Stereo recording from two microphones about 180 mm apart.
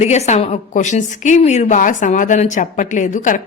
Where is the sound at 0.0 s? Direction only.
40° left (ahead or behind).